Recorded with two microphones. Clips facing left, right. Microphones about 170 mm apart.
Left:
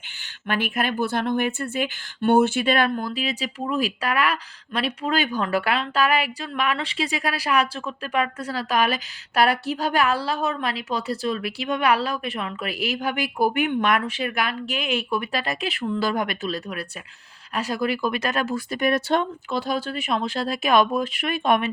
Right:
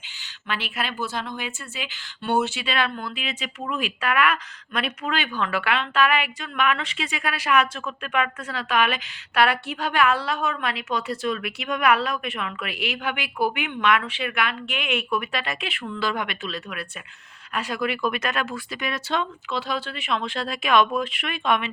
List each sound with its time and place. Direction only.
0.4 s speech: 50° left (ahead or behind)